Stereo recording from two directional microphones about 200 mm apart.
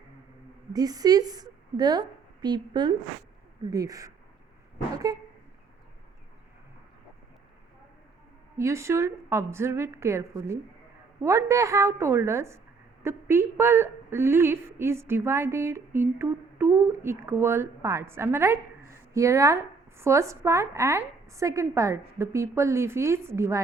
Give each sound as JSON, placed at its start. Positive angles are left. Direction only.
{"t": 0.7, "sound": "a woman's voice", "side_deg": -20}
{"t": 8.5, "sound": "a woman's voice", "side_deg": -15}